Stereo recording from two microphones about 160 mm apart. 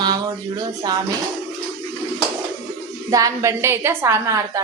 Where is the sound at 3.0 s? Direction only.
20° right (ahead or behind).